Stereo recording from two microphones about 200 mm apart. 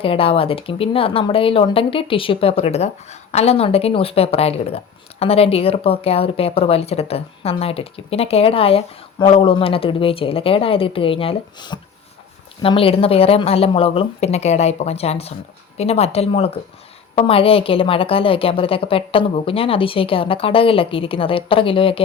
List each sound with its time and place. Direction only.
0.0 s a woman's voice: 30° left (ahead or behind)